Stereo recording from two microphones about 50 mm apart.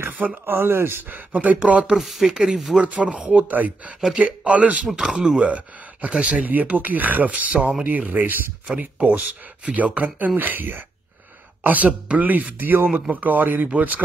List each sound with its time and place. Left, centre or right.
0.2 s speech: right
1.3 s speech: right
2.0 s speech: centre
2.8 s speech: right
6.5 s speech: right
9.7 s speech: right
10.3 s speech: right